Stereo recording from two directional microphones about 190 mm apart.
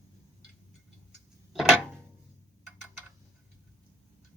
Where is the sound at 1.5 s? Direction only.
Centre (ahead or behind).